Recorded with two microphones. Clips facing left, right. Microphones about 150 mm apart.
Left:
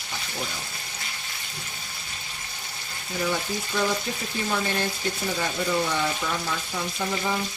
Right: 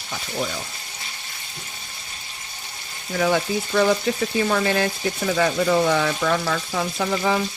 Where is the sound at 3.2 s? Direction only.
75° right (ahead or behind).